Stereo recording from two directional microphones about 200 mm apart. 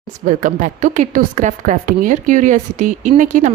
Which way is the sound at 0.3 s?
40° right (ahead or behind).